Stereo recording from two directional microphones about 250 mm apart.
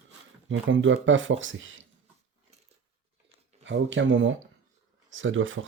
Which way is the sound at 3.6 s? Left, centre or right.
Right.